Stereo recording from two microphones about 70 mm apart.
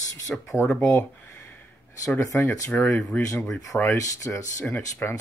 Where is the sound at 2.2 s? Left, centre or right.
Left.